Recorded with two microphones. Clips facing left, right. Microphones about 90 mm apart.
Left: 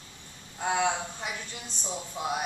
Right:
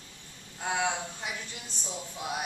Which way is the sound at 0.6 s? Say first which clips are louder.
Left 3 dB; 15° left (ahead or behind).